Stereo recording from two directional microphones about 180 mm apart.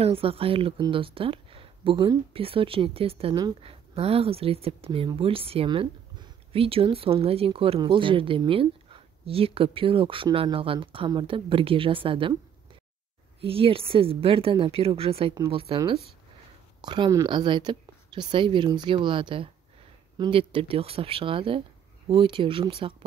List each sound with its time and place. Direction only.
0.0 s speech: 30° right (ahead or behind)
13.4 s speech: 30° right (ahead or behind)